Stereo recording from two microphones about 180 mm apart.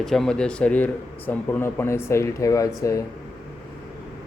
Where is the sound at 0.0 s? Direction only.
Centre (ahead or behind); by 3.0 s 15° left (ahead or behind).